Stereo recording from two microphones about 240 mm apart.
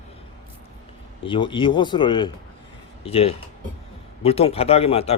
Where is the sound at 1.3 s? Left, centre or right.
Centre.